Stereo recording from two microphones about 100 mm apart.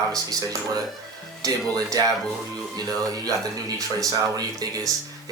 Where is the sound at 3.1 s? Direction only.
35° right (ahead or behind).